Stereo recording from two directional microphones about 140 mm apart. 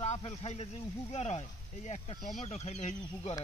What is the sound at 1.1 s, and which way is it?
Speech, 50° left (ahead or behind).